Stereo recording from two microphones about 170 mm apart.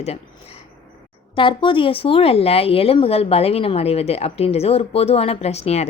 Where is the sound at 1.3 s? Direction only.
30° left (ahead or behind).